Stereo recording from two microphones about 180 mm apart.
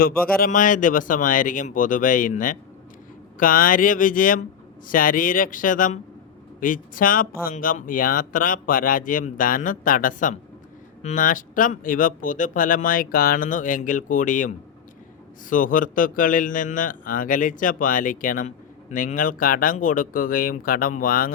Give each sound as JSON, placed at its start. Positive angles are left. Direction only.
{"t": 0.0, "sound": "a man's voice", "side_deg": 55}